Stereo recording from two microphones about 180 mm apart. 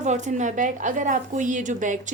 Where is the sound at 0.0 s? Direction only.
40° right (ahead or behind).